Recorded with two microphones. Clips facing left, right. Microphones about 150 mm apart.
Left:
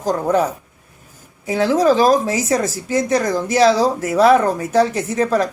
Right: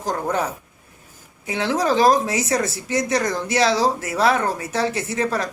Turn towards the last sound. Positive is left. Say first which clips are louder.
# left 6 dB
turn(degrees=40)  # may be behind; listen again after turning